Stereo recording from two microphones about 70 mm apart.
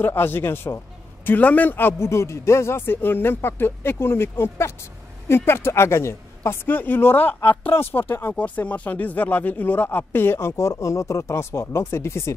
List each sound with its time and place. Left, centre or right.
0.0 s speech: left